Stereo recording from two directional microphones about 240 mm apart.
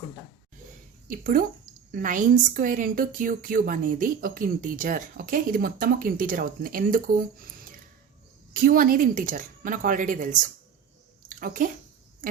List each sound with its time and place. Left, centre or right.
1.0 s a woman's voice: right